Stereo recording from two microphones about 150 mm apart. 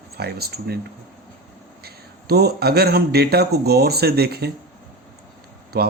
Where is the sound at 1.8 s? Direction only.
90° right.